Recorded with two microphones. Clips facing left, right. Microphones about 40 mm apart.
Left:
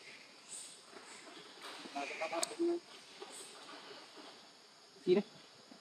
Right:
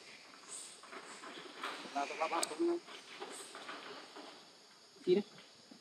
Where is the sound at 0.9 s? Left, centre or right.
Right.